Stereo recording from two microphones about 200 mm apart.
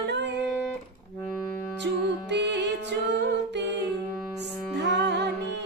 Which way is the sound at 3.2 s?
60° right (ahead or behind).